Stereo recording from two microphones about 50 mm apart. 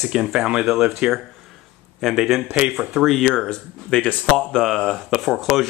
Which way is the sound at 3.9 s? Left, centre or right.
Left.